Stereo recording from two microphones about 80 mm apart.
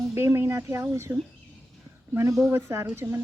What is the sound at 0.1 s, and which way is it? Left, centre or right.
Speech, right.